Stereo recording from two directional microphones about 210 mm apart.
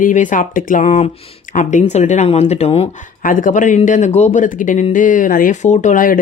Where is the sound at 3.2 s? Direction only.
40° left (ahead or behind).